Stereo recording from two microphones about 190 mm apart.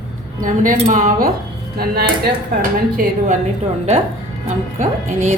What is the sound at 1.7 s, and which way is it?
A woman's voice, 55° right (ahead or behind).